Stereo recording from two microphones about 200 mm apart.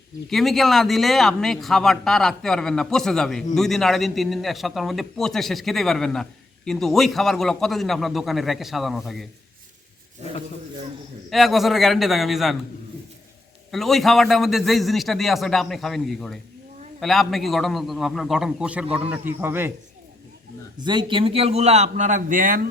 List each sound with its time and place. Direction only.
0.3 s a man's voice: centre (ahead or behind)
11.3 s a man's voice: centre (ahead or behind)
13.7 s a man's voice: centre (ahead or behind)
20.7 s a man's voice: 20° right (ahead or behind); by 22.6 s 45° right (ahead or behind)